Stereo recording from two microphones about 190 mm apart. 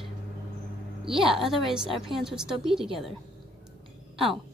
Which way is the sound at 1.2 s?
Centre (ahead or behind).